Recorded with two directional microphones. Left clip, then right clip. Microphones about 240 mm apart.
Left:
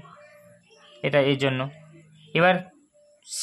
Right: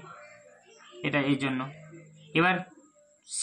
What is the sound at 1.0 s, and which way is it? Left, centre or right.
Speech, left.